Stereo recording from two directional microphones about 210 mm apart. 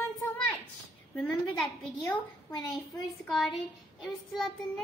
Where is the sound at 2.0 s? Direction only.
20° left (ahead or behind).